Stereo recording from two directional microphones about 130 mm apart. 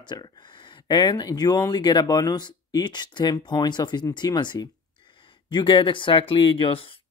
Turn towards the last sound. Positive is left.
turn(degrees=40)  # may be behind; listen again after turning